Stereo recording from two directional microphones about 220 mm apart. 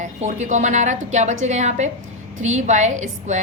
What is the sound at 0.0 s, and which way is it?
A woman's voice, 35° right (ahead or behind).